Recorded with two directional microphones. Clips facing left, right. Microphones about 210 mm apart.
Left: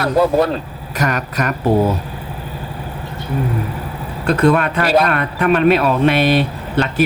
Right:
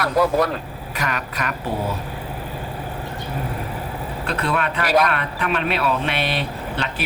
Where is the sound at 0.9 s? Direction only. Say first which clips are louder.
Left 7 dB; 45° left (ahead or behind).